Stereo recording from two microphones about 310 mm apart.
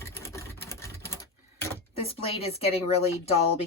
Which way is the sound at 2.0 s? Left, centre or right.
Centre.